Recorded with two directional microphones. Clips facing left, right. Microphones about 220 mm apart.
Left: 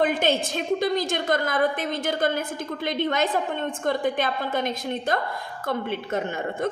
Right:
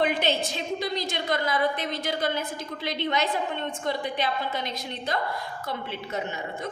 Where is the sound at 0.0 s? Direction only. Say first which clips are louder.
Left 3 dB; 50° left (ahead or behind).